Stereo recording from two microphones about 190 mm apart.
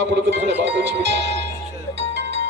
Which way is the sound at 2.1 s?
70° right (ahead or behind).